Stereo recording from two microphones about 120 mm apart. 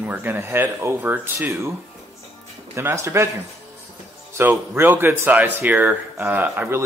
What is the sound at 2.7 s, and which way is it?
Speech, 25° right (ahead or behind).